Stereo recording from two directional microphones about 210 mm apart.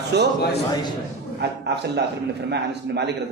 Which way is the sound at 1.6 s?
55° right (ahead or behind).